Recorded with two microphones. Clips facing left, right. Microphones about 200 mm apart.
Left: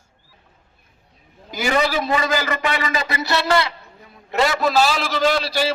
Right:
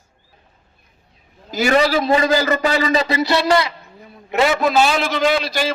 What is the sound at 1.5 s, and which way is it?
A man's voice, 30° right (ahead or behind).